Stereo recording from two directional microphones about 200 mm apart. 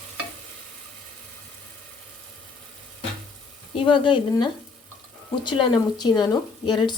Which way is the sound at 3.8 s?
25° left (ahead or behind).